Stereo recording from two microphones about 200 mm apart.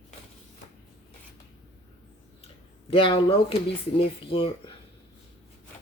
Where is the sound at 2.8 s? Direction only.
25° left (ahead or behind).